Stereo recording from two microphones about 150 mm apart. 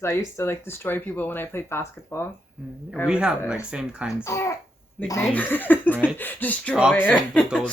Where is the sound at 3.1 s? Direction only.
5° right (ahead or behind).